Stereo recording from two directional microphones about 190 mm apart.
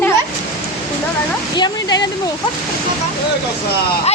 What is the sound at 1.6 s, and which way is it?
Speech, 20° left (ahead or behind).